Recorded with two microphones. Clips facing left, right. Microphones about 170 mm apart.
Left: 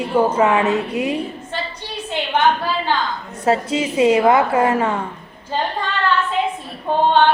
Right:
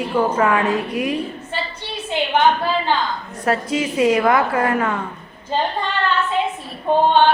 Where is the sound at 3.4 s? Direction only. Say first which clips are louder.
Left 2 dB; 25° left (ahead or behind).